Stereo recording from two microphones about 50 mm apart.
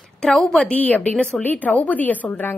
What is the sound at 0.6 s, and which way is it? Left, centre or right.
A woman's voice, left.